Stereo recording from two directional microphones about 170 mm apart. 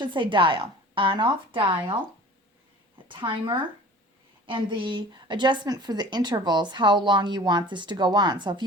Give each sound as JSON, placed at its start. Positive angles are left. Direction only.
{"t": 0.0, "sound": "a woman's voice", "side_deg": -30}
{"t": 3.1, "sound": "a woman's voice", "side_deg": -30}